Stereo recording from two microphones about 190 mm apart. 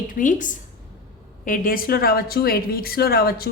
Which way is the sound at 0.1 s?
45° left (ahead or behind).